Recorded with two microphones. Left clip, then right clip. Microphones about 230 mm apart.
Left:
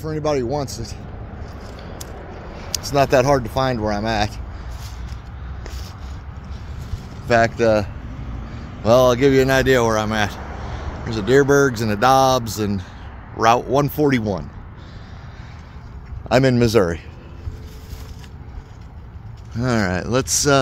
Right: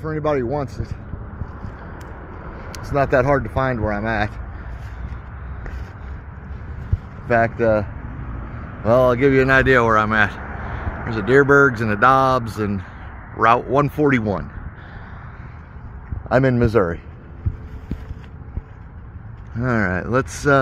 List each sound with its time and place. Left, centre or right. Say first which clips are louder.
0.0 s speech: even; centre
2.9 s speech: left 1 dB; left
7.2 s speech: left 1 dB; left
16.3 s speech: left 1 dB; left
19.6 s speech: even; centre